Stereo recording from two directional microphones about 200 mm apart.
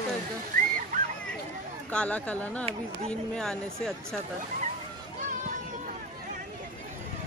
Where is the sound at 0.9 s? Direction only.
35° right (ahead or behind).